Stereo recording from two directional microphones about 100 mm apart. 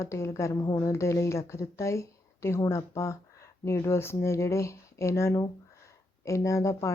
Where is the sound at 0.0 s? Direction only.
30° left (ahead or behind).